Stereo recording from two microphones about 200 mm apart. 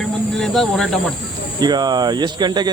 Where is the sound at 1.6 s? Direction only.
20° right (ahead or behind).